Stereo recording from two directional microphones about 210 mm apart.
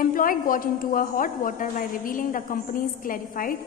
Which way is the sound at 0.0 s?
40° left (ahead or behind).